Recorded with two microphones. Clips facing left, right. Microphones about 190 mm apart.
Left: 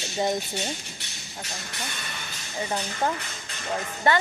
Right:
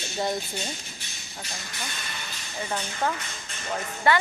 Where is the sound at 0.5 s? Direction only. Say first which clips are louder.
Left 3 dB; 75° left (ahead or behind).